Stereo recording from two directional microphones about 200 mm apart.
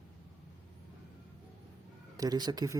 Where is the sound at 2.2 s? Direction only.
20° right (ahead or behind).